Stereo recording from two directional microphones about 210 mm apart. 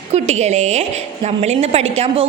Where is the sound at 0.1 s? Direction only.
30° right (ahead or behind).